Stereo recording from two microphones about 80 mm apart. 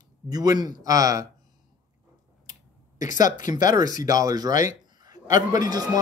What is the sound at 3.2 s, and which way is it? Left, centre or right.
Speech, right.